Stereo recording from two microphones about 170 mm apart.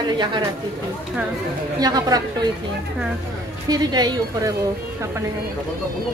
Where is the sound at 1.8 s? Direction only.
25° right (ahead or behind).